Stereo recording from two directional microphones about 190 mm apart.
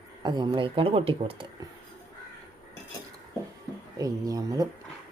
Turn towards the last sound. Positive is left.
turn(degrees=-20)  # may be behind; listen again after turning